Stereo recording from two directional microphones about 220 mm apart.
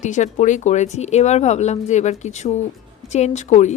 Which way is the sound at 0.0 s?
35° left (ahead or behind).